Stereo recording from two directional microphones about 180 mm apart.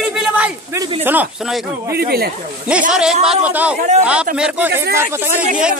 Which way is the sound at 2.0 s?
60° right (ahead or behind).